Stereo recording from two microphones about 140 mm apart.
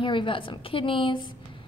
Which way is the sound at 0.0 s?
35° left (ahead or behind).